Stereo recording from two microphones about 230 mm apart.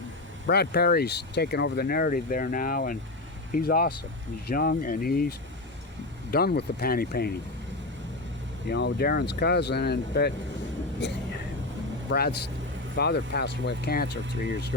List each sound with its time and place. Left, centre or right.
0.4 s speech: left
6.3 s speech: left
8.6 s speech: left